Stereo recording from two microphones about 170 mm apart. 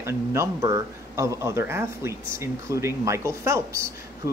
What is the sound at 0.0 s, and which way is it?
Speech, 15° right (ahead or behind).